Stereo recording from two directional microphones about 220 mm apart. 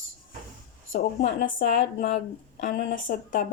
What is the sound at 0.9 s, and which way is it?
A woman's voice, 30° left (ahead or behind).